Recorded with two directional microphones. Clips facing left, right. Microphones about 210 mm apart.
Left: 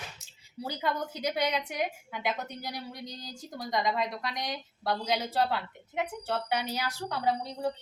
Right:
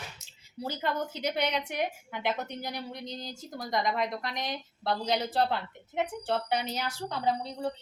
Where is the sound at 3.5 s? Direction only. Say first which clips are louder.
Even; 20° left (ahead or behind).